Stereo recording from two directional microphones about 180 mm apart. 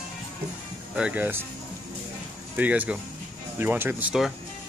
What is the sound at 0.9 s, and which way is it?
Speech, 5° right (ahead or behind).